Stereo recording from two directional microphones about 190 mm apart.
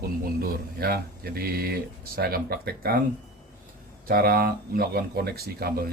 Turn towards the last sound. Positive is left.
turn(degrees=-55)  # may be behind; listen again after turning